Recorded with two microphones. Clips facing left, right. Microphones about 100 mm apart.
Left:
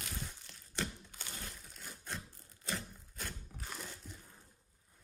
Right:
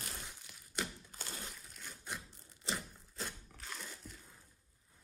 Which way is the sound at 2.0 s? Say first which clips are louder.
Left 1 dB; 15° right (ahead or behind).